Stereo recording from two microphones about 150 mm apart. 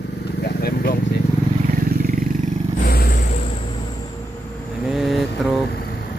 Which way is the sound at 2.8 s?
85° left.